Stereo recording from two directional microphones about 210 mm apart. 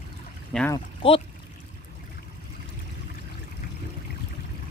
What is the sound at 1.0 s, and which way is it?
Speech, 25° left (ahead or behind).